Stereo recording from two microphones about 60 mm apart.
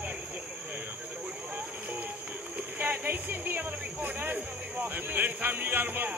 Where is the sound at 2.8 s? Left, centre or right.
Right.